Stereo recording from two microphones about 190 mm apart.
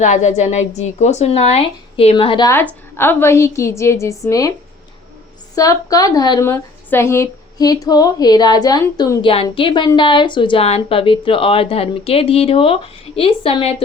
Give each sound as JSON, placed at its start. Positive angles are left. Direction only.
{"t": 0.0, "sound": "a woman's voice", "side_deg": 40}
{"t": 2.9, "sound": "a woman's voice", "side_deg": 10}
{"t": 5.5, "sound": "a woman's voice", "side_deg": 20}
{"t": 9.2, "sound": "a woman's voice", "side_deg": 30}